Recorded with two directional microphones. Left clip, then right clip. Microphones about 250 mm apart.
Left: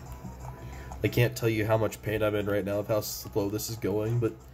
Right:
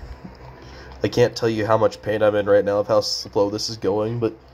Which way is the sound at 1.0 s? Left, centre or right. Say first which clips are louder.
Right 9 dB; centre.